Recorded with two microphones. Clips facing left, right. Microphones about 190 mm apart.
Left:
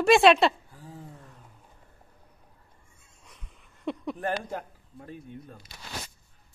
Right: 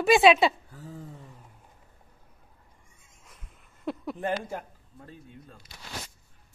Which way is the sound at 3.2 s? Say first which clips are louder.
Left 1 dB; 5° right (ahead or behind).